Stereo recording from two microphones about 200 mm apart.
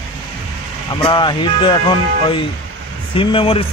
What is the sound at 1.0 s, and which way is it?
Speech, 25° left (ahead or behind).